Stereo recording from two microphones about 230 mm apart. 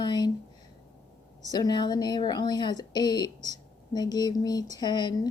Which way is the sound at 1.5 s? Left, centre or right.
Centre.